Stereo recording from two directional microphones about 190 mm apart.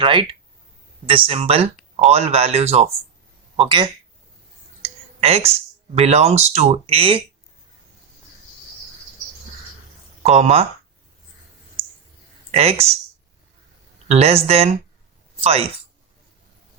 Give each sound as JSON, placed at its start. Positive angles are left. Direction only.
{"t": 0.0, "sound": "speech", "side_deg": -25}
{"t": 10.2, "sound": "speech", "side_deg": -35}
{"t": 12.5, "sound": "speech", "side_deg": -35}
{"t": 14.1, "sound": "a woman's voice", "side_deg": -35}